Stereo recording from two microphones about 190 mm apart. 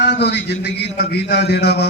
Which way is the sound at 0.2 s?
60° left (ahead or behind).